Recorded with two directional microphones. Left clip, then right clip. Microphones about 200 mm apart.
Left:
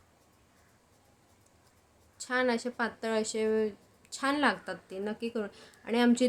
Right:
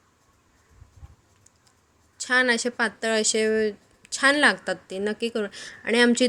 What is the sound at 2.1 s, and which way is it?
Speech, 15° right (ahead or behind).